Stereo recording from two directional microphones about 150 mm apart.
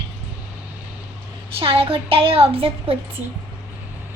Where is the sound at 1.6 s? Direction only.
35° right (ahead or behind).